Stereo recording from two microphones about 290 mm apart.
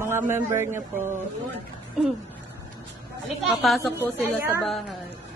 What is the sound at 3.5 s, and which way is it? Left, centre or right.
A woman's voice, centre.